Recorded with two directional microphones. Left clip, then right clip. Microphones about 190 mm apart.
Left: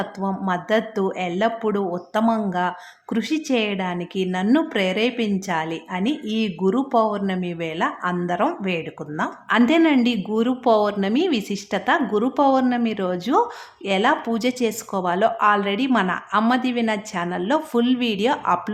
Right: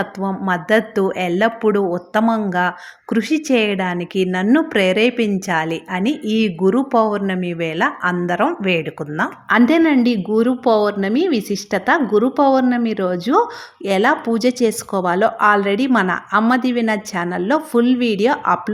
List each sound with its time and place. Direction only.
0.0 s speech: 20° right (ahead or behind)